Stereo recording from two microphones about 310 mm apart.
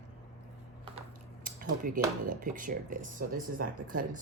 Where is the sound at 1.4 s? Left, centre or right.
Right.